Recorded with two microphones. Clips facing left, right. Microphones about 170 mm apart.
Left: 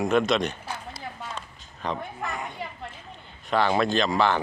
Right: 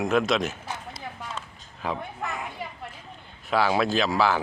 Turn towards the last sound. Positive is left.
turn(degrees=-5)  # may be behind; listen again after turning